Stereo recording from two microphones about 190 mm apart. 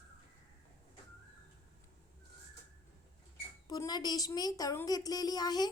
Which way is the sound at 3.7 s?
20° left (ahead or behind).